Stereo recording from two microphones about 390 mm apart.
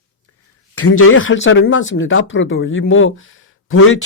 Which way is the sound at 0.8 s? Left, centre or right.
Left.